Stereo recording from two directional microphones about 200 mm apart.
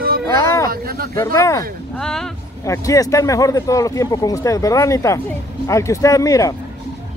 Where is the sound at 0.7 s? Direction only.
50° right (ahead or behind).